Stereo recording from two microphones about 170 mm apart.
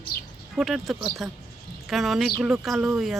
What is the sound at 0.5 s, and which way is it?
Speech, centre (ahead or behind).